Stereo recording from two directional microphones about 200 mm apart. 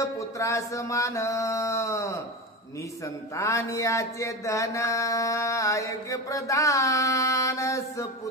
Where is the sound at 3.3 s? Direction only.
15° left (ahead or behind).